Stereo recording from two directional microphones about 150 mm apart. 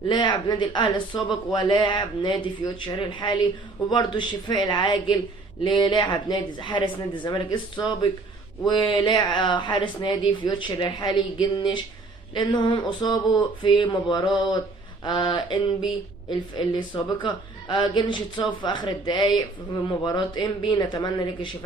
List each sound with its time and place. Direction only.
0.1 s speech: 30° left (ahead or behind)